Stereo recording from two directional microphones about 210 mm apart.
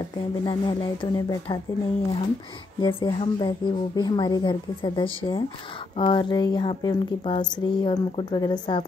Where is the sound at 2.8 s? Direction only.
25° left (ahead or behind).